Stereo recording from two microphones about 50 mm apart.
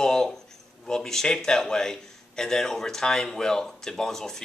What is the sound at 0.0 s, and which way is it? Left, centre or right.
A man's voice, centre.